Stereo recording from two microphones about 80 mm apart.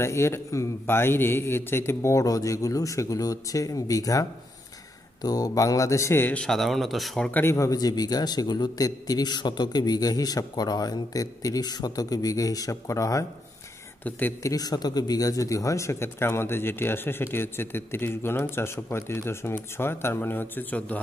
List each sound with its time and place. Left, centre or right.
0.0 s a man's voice: left
6.4 s speech: centre
7.2 s speech: left
7.5 s a man's voice: left
14.4 s speech: left